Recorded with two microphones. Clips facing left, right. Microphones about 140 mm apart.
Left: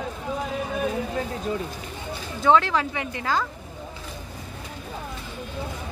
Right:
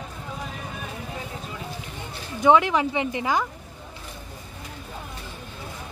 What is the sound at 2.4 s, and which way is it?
Speech, 15° right (ahead or behind).